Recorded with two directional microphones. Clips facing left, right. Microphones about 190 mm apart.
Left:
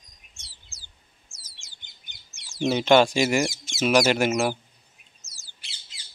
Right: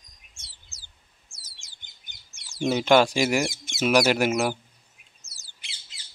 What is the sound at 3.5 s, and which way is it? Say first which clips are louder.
Speech: left 1 dB; 55° right (ahead or behind).